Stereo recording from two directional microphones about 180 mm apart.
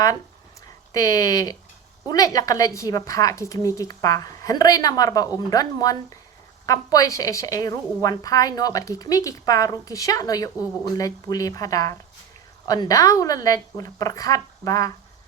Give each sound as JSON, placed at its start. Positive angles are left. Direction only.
{"t": 0.9, "sound": "a woman's voice", "side_deg": 20}